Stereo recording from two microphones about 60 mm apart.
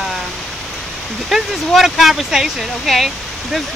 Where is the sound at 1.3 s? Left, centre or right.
Centre.